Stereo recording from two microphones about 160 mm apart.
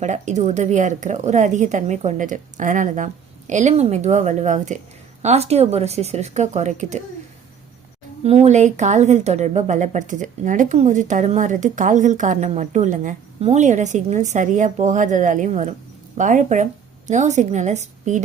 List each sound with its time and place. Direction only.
0.0 s speech: 50° right (ahead or behind)
8.2 s speech: 40° right (ahead or behind)